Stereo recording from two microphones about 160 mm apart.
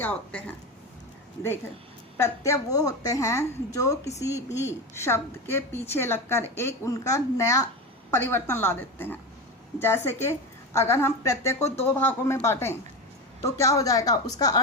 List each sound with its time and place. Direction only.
0.0 s a woman's voice: 10° left (ahead or behind)
2.1 s a woman's voice: 20° left (ahead or behind)